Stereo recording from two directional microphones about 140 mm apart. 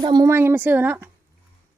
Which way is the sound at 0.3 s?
15° right (ahead or behind).